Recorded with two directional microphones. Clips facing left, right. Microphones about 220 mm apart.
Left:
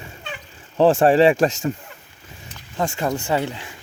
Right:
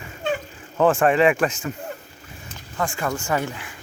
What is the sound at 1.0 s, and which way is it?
Speech, 30° left (ahead or behind).